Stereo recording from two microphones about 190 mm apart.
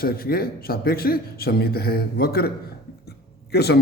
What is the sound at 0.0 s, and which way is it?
Speech, 50° left (ahead or behind).